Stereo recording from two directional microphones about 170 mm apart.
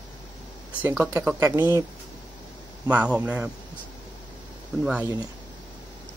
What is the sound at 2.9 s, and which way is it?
Speech, 10° right (ahead or behind).